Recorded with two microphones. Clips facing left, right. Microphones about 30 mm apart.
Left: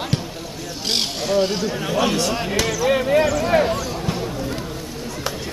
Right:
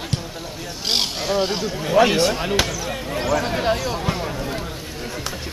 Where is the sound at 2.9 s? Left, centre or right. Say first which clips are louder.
Left 10 dB; left.